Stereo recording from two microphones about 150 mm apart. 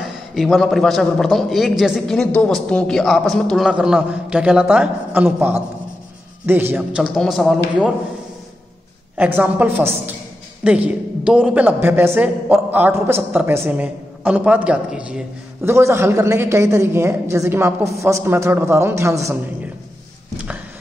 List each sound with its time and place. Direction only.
0.0 s a man's voice: centre (ahead or behind)
7.0 s a man's voice: centre (ahead or behind)
9.1 s a woman's voice: 10° right (ahead or behind)